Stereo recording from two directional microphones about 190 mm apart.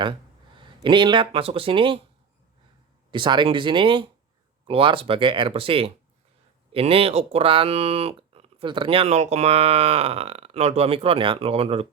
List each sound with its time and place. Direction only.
0.0 s speech: 25° right (ahead or behind)
3.1 s speech: 25° right (ahead or behind)